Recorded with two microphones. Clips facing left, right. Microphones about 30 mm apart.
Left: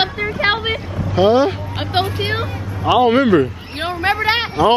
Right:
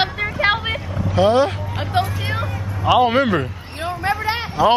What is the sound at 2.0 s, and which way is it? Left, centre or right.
Speech, left.